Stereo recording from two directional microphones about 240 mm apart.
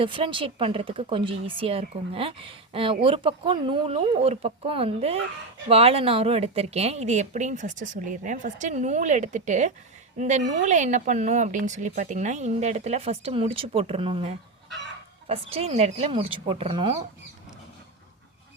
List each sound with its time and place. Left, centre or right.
0.0 s speech: right